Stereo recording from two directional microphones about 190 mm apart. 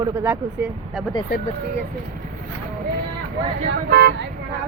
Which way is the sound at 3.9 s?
55° right (ahead or behind).